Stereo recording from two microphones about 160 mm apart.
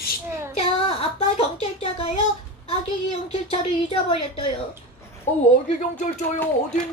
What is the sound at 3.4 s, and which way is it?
Speech, 35° left (ahead or behind).